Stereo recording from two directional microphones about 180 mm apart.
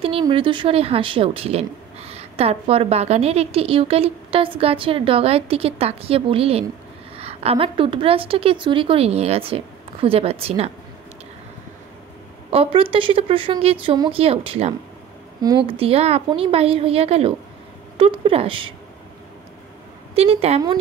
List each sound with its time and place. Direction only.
0.0 s a woman's voice: 30° right (ahead or behind)
12.4 s a woman's voice: 30° right (ahead or behind)
20.2 s a woman's voice: 35° right (ahead or behind)